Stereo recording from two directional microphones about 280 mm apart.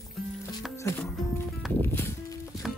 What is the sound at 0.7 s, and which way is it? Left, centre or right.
Music, centre.